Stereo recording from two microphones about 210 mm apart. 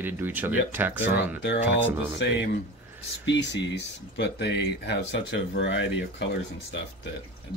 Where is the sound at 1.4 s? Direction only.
55° left (ahead or behind).